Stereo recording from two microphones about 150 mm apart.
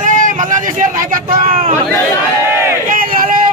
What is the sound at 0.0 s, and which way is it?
Speech, 60° right (ahead or behind).